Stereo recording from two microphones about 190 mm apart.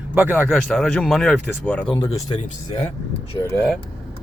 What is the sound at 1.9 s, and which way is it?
Speech, 30° left (ahead or behind).